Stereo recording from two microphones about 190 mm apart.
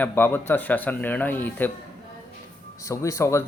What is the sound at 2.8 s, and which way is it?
Speech, 15° left (ahead or behind).